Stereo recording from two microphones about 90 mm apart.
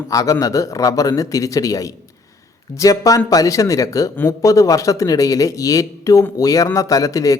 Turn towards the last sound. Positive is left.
turn(degrees=40)  # may be behind; listen again after turning